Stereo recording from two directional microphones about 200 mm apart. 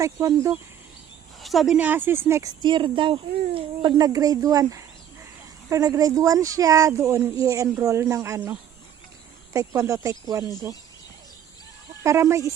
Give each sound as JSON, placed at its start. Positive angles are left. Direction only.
{"t": 0.0, "sound": "speech", "side_deg": -15}
{"t": 1.4, "sound": "speech", "side_deg": 0}
{"t": 12.0, "sound": "speech", "side_deg": -15}